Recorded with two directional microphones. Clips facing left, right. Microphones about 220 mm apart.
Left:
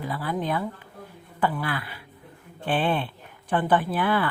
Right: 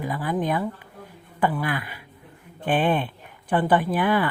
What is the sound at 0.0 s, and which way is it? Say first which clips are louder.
Speech: right 3 dB; 15° right (ahead or behind).